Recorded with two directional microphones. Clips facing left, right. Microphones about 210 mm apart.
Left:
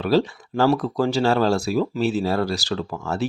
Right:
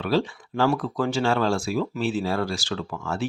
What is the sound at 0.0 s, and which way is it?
Speech, 40° left (ahead or behind).